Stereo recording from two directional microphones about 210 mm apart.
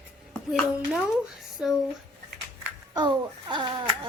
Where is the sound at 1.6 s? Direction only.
5° right (ahead or behind).